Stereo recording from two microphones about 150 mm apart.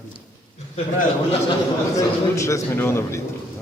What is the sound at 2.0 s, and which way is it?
A man's voice, 20° left (ahead or behind).